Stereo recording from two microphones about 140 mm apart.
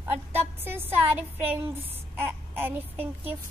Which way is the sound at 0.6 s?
15° right (ahead or behind).